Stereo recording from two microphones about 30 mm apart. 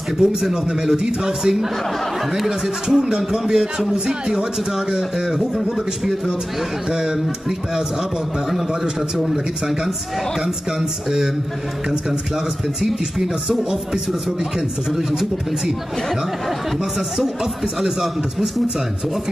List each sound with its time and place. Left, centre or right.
0.2 s speech: centre
0.9 s speech: right
2.3 s speech: centre
4.7 s speech: centre
10.4 s speech: centre